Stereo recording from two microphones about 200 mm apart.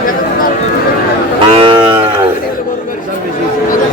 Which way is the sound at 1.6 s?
25° right (ahead or behind).